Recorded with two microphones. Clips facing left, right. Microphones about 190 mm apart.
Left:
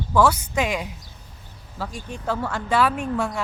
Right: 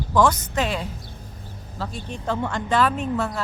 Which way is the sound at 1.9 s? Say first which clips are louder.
Even; 10° left (ahead or behind).